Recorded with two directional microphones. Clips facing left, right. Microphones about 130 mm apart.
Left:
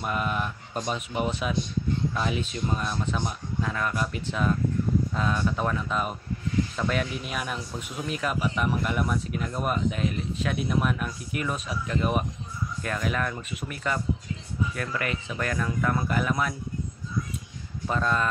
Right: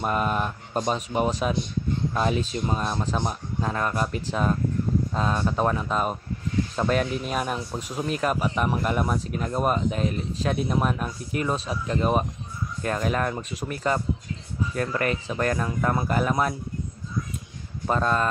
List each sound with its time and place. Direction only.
0.0 s speech: 40° right (ahead or behind)
17.8 s speech: 40° right (ahead or behind)